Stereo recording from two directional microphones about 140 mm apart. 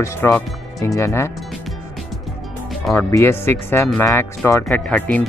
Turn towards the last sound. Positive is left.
turn(degrees=10)  # may be behind; listen again after turning